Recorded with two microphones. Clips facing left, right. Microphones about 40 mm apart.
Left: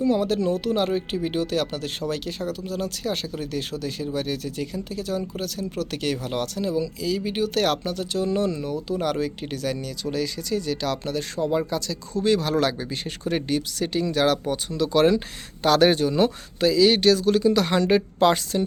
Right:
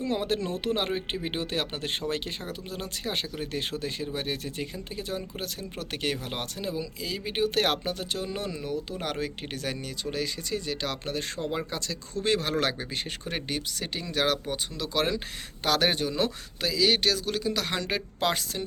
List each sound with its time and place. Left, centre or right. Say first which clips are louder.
0.0 s speech: left 7 dB; right; by 14.8 s centre
14.9 s speech: left 9 dB; centre